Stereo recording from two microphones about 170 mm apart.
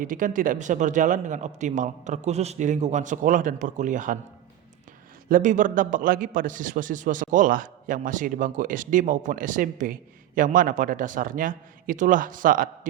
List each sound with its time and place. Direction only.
0.0 s a man's voice: 50° right (ahead or behind)
5.3 s a man's voice: 50° right (ahead or behind)